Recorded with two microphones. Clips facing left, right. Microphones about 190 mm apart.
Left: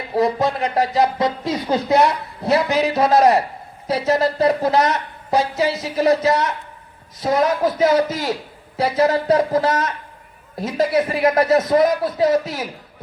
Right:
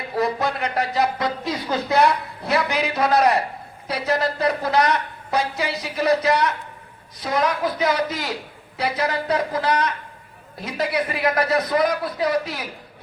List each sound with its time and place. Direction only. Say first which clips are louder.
0.2 s speech: left 4 dB; 25° left (ahead or behind)